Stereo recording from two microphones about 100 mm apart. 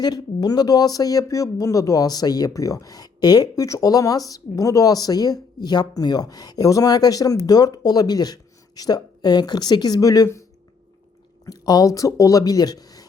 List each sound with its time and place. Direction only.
0.0 s speech: 40° left (ahead or behind)
11.4 s speech: 40° left (ahead or behind)